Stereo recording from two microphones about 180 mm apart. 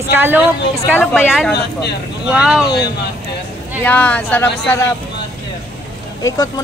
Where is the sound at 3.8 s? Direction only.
10° left (ahead or behind).